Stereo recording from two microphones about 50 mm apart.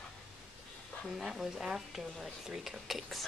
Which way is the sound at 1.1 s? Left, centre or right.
Centre.